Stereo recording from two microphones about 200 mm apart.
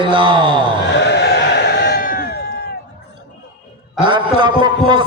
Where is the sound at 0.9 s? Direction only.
60° left (ahead or behind).